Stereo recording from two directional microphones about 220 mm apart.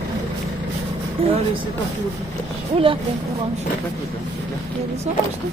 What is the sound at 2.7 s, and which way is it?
Speech, 25° right (ahead or behind).